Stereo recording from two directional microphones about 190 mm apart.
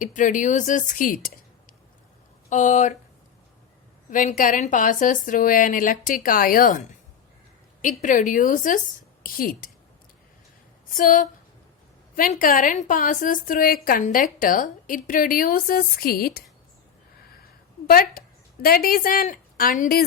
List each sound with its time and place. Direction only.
0.0 s a woman's voice: 45° left (ahead or behind)
2.5 s speech: 40° left (ahead or behind)
4.1 s a woman's voice: 40° left (ahead or behind)
10.9 s a woman's voice: 45° left (ahead or behind)
17.8 s a woman's voice: 50° left (ahead or behind)